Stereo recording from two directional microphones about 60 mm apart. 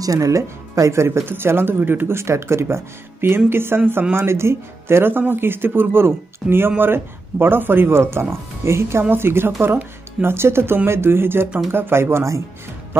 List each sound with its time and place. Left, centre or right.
0.0 s speech: right